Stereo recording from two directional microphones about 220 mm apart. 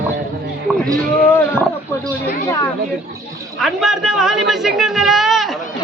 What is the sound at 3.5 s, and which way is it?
A man's voice, centre (ahead or behind).